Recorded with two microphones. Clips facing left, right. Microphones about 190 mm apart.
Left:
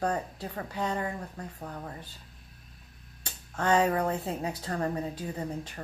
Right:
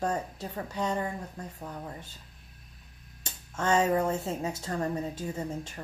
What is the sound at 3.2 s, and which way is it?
Music, 25° right (ahead or behind).